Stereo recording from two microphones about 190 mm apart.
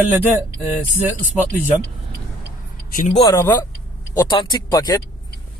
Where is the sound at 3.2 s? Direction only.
15° left (ahead or behind).